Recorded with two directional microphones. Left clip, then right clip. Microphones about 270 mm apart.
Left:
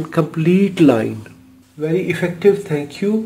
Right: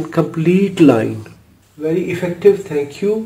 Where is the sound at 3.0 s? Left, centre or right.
Left.